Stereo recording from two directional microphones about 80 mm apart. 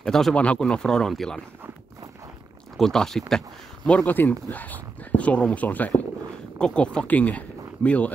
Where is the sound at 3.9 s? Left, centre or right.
Centre.